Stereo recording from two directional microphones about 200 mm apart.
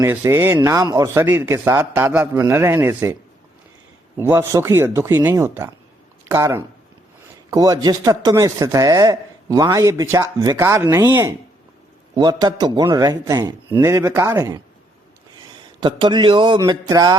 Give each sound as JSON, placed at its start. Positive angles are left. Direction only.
{"t": 0.0, "sound": "speech", "side_deg": -15}
{"t": 4.2, "sound": "a man's voice", "side_deg": -15}